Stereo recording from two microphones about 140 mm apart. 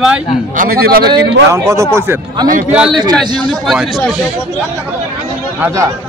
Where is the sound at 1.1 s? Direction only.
20° right (ahead or behind).